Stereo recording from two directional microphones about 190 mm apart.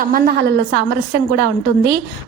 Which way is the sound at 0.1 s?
55° right (ahead or behind).